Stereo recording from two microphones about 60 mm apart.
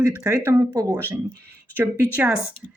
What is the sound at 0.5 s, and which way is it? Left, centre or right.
Speech, right.